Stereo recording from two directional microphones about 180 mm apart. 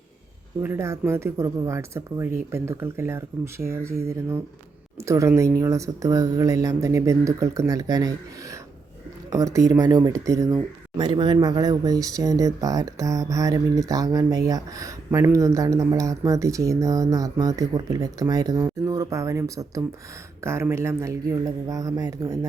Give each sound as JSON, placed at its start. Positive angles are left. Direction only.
{"t": 0.6, "sound": "speech", "side_deg": -15}